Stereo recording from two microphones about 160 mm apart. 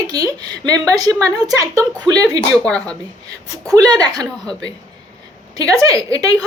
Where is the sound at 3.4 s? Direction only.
20° right (ahead or behind).